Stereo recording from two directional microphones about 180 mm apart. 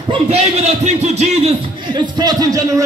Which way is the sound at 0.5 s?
35° right (ahead or behind).